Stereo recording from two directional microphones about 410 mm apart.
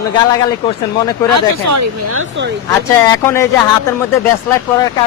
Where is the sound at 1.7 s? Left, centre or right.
Right.